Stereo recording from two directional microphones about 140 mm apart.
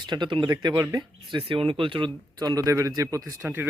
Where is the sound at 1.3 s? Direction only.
40° right (ahead or behind).